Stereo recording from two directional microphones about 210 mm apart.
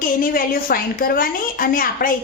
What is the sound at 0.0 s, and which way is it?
A woman's voice, 45° left (ahead or behind).